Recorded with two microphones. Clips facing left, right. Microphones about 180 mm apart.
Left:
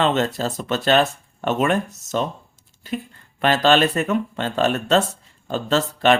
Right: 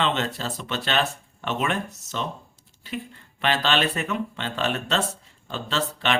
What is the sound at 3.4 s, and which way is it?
A man's voice, 45° left (ahead or behind).